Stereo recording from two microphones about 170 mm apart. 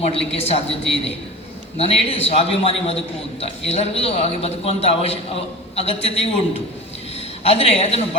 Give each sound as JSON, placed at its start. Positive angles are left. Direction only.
{"t": 0.0, "sound": "a man's voice", "side_deg": 35}
{"t": 7.4, "sound": "a man's voice", "side_deg": 35}